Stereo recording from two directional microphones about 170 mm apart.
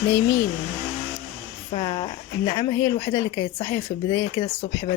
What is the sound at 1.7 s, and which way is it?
Speech, 30° left (ahead or behind).